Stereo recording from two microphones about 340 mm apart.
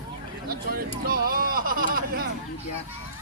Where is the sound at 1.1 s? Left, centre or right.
Right.